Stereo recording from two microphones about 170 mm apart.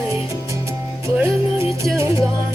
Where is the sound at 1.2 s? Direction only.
15° right (ahead or behind).